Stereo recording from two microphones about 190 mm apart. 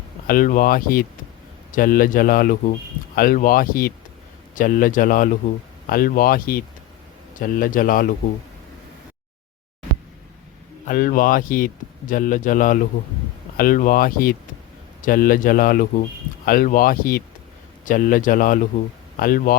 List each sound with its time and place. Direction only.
0.3 s speech: 45° left (ahead or behind)
10.8 s speech: 45° left (ahead or behind)